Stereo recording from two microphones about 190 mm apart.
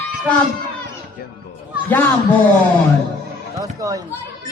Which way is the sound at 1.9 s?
10° left (ahead or behind).